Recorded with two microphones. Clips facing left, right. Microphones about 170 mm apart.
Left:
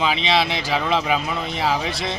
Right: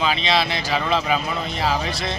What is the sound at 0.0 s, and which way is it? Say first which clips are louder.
A man's voice: left 1 dB; 20° left (ahead or behind).